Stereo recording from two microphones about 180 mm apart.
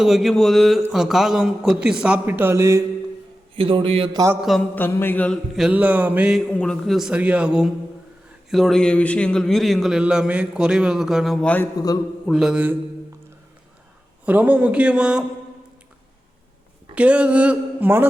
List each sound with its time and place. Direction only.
0.0 s a man's voice: centre (ahead or behind)
3.5 s a man's voice: 30° right (ahead or behind)
4.4 s a man's voice: centre (ahead or behind)
6.5 s a man's voice: 5° left (ahead or behind)
11.8 s a man's voice: 20° left (ahead or behind)
12.3 s a man's voice: 5° right (ahead or behind)
14.3 s speech: 10° right (ahead or behind)
16.9 s speech: 5° right (ahead or behind)